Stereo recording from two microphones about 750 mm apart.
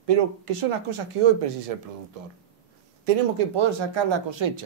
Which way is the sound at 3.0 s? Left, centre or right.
Right.